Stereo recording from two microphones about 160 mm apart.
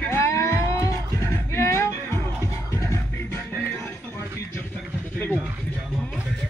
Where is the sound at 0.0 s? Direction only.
15° left (ahead or behind).